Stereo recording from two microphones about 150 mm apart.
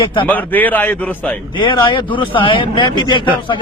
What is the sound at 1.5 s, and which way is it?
A man's voice, 30° left (ahead or behind).